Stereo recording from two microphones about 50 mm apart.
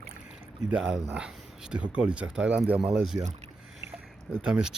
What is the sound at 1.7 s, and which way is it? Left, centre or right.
Speech, right.